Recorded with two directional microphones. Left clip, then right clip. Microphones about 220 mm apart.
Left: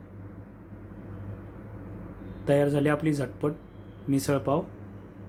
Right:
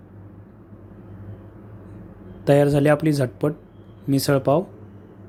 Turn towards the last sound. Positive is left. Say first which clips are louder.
# right 7 dB
turn(degrees=-30)  # may be behind; listen again after turning